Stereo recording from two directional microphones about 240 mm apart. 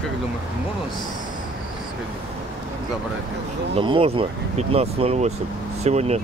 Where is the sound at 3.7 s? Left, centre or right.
Right.